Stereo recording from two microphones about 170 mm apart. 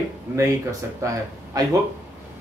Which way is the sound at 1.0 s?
15° right (ahead or behind).